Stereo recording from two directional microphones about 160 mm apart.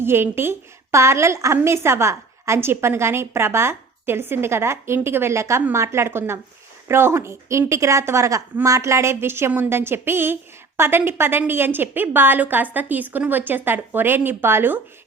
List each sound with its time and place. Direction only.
0.0 s a woman's voice: 15° right (ahead or behind)